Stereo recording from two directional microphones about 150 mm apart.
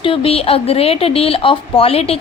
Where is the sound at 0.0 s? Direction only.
35° left (ahead or behind).